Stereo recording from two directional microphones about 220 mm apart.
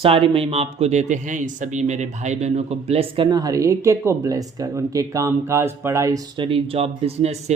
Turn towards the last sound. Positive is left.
turn(degrees=-30)  # may be behind; listen again after turning